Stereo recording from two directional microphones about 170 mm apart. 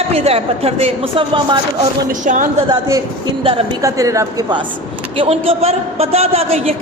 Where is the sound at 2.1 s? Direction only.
50° right (ahead or behind).